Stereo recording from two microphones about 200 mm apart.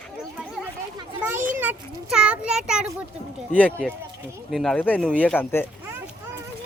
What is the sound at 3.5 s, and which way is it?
Speech, 5° left (ahead or behind).